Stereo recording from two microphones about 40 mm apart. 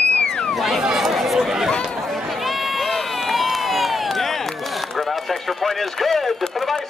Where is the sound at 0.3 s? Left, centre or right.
Centre.